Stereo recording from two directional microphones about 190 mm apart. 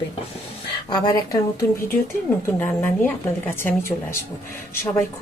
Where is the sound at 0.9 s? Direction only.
20° left (ahead or behind).